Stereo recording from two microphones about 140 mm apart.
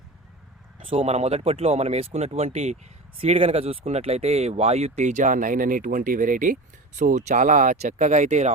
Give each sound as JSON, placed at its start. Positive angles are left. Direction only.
{"t": 0.8, "sound": "speech", "side_deg": -40}